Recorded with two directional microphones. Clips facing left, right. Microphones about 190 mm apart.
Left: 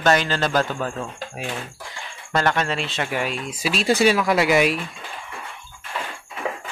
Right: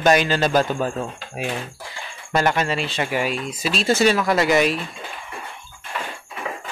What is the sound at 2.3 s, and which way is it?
Speech, 10° right (ahead or behind).